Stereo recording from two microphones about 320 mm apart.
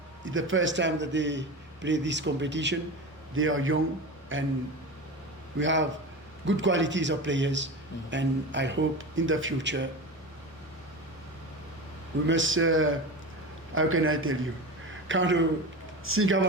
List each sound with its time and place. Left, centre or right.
0.3 s a man's voice: right
5.5 s a man's voice: right
12.3 s a man's voice: right